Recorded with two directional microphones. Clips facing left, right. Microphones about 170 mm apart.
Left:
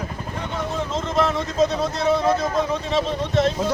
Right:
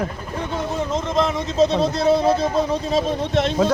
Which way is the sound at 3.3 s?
70° right (ahead or behind).